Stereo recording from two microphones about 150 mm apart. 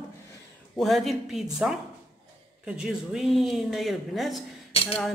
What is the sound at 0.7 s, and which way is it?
Speech, centre (ahead or behind).